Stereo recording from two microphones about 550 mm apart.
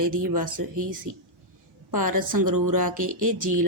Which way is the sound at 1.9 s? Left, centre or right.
Right.